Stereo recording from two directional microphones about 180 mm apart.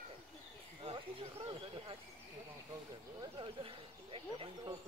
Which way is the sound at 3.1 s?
30° right (ahead or behind).